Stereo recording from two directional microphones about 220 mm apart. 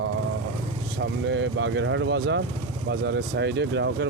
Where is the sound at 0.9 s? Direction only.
55° right (ahead or behind).